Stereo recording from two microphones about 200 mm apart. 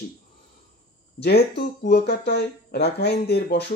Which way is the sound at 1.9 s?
55° left (ahead or behind).